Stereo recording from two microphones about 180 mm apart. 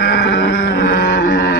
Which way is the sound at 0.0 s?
75° left (ahead or behind).